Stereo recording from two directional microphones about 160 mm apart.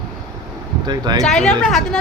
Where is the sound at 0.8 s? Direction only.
25° right (ahead or behind).